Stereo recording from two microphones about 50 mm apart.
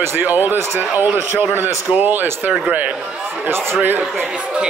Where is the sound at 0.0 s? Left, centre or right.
Right.